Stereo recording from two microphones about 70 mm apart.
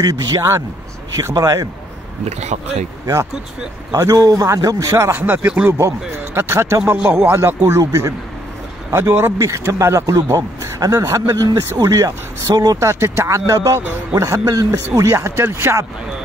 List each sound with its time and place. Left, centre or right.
0.0 s speech: right
0.4 s speech: right
1.3 s speech: right
3.9 s speech: right
5.1 s speech: right
5.7 s speech: right
7.8 s speech: right
8.9 s speech: right
9.4 s speech: right
10.8 s speech: right
12.8 s speech: right
15.0 s speech: right